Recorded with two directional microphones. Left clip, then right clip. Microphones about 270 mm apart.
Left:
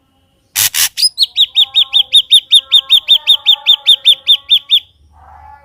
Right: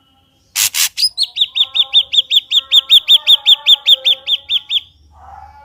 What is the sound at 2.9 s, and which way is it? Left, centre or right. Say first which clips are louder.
Bird: even; centre.